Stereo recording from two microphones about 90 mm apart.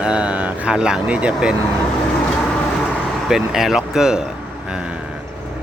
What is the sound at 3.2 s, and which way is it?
Speech, 5° right (ahead or behind).